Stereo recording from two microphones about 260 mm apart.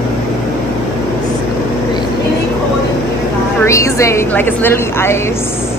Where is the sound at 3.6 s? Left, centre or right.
Centre.